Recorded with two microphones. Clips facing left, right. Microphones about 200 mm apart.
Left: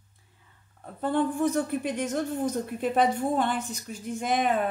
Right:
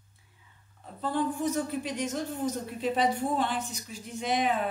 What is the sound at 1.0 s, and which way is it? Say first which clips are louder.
Speech: left 4 dB; 55° left (ahead or behind).